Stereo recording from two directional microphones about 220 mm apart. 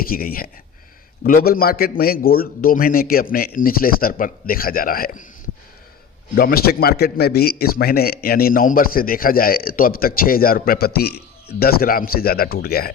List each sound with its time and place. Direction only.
0.0 s a man's voice: 40° left (ahead or behind)
6.3 s speech: 45° left (ahead or behind)